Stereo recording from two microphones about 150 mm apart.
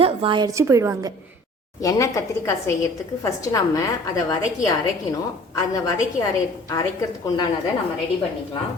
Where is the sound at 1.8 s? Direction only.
20° left (ahead or behind).